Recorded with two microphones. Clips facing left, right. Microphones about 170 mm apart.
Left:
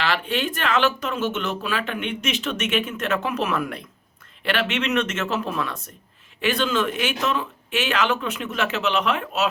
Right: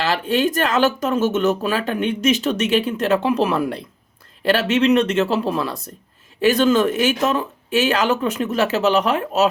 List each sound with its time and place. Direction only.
0.0 s speech: 40° right (ahead or behind)